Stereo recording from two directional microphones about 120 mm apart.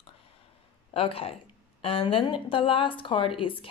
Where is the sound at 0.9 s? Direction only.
50° left (ahead or behind).